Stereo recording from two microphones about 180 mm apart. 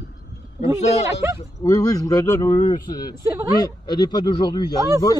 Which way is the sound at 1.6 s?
20° left (ahead or behind).